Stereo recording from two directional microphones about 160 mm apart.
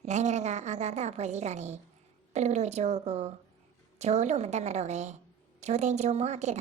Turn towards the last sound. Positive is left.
turn(degrees=-45)  # may be behind; listen again after turning